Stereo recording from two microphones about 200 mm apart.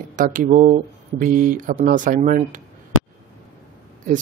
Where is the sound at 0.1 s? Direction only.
40° right (ahead or behind).